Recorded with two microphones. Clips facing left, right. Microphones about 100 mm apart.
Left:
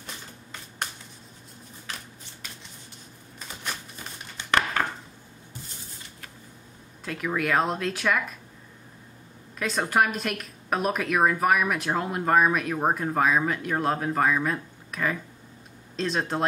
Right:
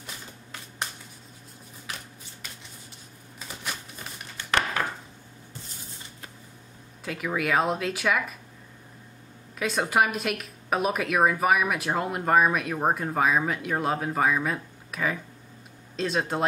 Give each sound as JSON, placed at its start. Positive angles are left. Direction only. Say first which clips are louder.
{"t": 0.0, "sound": "a sound", "louder": "even", "side_deg": -5}
{"t": 4.4, "sound": "chopping", "louder": "even", "side_deg": 20}
{"t": 7.1, "sound": "speech", "louder": "even", "side_deg": -5}
{"t": 9.6, "sound": "speech", "louder": "even", "side_deg": -5}